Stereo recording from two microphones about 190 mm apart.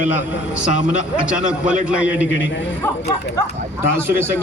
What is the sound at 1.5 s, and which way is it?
Speech, 5° right (ahead or behind).